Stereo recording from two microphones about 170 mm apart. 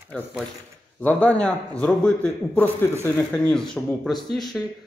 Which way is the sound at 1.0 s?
5° left (ahead or behind).